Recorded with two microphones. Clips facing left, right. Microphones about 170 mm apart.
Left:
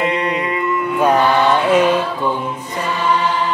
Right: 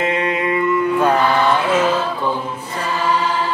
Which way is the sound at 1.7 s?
15° left (ahead or behind).